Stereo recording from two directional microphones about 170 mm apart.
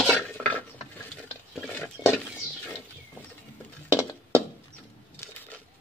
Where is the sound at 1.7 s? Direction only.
15° left (ahead or behind).